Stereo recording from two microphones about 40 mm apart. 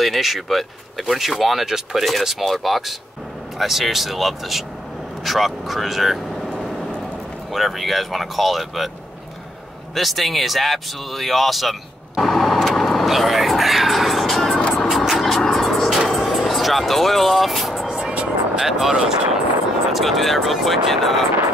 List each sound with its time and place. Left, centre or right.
0.0 s speech: centre
6.6 s vehicle: centre
7.5 s speech: centre
9.9 s speech: centre
12.2 s vehicle: centre
12.6 s music: centre
14.7 s vehicle: centre
15.6 s music: centre
16.1 s vehicle: centre
17.8 s vehicle: centre
18.6 s speech: centre
19.9 s speech: centre